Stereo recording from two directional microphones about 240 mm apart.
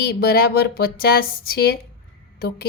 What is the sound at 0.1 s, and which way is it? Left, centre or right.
A woman's voice, left.